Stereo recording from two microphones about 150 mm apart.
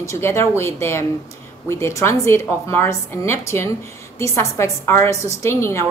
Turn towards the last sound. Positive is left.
turn(degrees=20)  # may be behind; listen again after turning